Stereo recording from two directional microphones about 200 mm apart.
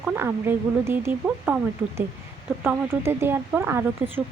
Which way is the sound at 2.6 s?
10° right (ahead or behind).